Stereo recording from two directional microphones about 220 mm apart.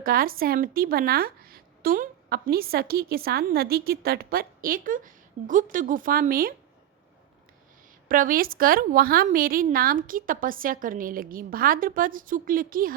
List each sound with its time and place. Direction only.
0.0 s a woman's voice: 40° right (ahead or behind)
8.0 s a woman's voice: 40° right (ahead or behind)